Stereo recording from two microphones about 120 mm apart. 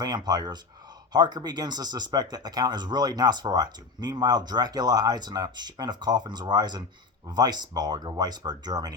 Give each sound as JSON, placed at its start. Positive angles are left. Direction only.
{"t": 0.0, "sound": "speech", "side_deg": -35}